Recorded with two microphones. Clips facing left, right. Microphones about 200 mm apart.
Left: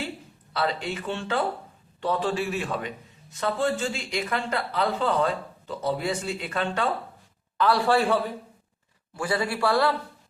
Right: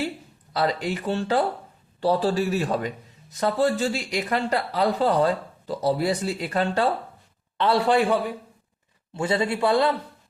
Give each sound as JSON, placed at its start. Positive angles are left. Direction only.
{"t": 0.5, "sound": "a man's voice", "side_deg": -35}
{"t": 7.6, "sound": "a man's voice", "side_deg": -20}